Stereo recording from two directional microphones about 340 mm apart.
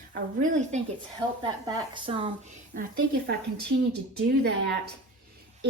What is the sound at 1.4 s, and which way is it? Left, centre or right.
A woman's voice, centre.